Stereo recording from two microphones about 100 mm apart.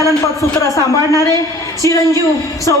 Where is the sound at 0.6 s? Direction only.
30° left (ahead or behind).